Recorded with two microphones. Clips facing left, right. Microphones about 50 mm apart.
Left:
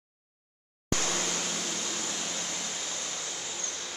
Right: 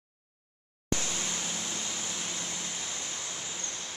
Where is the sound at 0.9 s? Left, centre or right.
Left.